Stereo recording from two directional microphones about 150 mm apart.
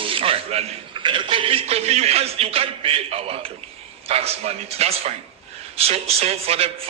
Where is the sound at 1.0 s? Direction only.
35° right (ahead or behind).